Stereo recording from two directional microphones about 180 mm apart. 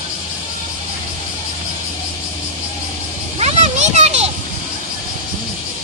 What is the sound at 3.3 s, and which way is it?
Children playing, 35° right (ahead or behind).